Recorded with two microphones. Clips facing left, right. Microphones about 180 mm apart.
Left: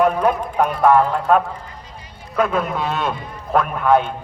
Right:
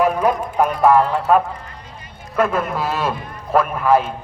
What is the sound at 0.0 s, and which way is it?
A man's voice, 5° right (ahead or behind).